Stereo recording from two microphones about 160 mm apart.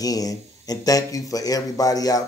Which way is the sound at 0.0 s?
20° left (ahead or behind).